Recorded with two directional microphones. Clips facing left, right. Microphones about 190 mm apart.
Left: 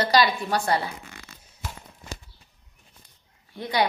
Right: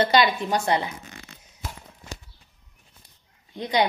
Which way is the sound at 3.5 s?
20° right (ahead or behind).